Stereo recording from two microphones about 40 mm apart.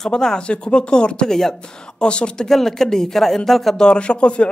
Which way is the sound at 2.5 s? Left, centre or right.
Centre.